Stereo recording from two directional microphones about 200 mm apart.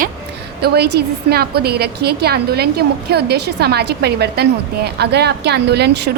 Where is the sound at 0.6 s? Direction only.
55° right (ahead or behind).